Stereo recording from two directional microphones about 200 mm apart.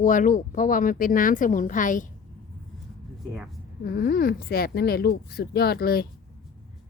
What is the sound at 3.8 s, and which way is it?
Speech, 50° left (ahead or behind).